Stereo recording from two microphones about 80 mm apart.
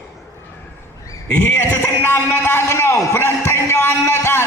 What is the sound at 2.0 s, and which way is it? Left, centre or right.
A man's voice, left.